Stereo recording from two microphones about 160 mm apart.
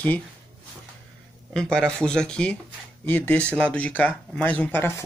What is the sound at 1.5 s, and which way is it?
Speech, 5° left (ahead or behind).